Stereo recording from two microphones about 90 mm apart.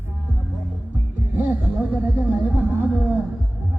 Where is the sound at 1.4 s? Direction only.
20° right (ahead or behind).